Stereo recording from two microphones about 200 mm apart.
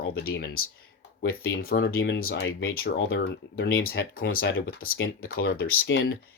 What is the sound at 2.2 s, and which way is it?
Speech, 75° left (ahead or behind).